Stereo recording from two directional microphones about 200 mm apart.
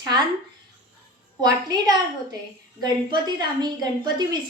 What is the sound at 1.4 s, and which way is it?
A woman's voice, 20° right (ahead or behind).